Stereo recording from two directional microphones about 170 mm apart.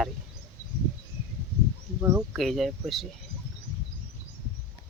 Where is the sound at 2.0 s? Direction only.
15° right (ahead or behind).